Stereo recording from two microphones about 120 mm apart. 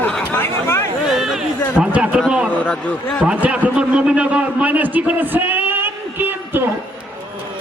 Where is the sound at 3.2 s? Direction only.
10° right (ahead or behind).